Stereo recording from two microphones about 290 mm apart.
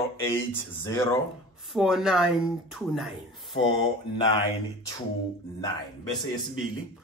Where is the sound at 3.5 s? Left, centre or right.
Centre.